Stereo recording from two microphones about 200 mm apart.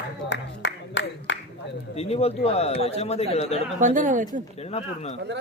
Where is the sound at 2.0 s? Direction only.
30° left (ahead or behind).